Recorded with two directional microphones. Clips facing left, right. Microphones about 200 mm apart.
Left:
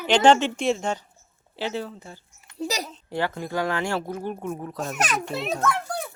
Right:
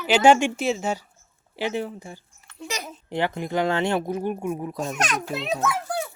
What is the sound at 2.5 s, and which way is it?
Speech, 35° left (ahead or behind).